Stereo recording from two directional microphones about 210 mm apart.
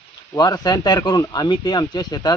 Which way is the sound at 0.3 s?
20° left (ahead or behind).